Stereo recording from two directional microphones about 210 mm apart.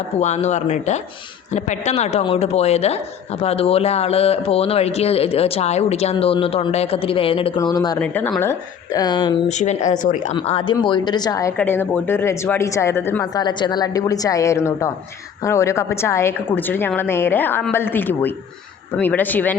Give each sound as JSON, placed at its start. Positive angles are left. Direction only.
{"t": 0.2, "sound": "a woman's voice", "side_deg": 35}
{"t": 7.9, "sound": "speech", "side_deg": 10}
{"t": 9.5, "sound": "a woman's voice", "side_deg": 35}
{"t": 10.3, "sound": "speech", "side_deg": 25}